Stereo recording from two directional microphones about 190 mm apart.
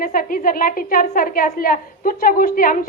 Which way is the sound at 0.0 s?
45° left (ahead or behind).